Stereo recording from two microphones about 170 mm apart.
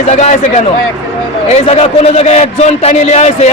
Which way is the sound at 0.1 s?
45° left (ahead or behind).